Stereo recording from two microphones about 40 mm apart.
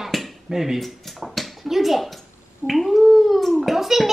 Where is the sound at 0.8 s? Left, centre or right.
Centre.